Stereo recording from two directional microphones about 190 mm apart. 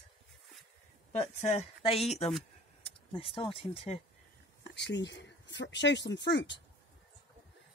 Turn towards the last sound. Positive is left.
turn(degrees=65)  # may be behind; listen again after turning